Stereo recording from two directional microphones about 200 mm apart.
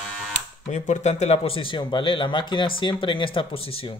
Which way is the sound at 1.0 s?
35° left (ahead or behind).